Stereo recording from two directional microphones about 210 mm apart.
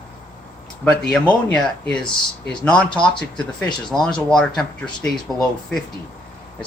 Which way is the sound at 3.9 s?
Centre (ahead or behind).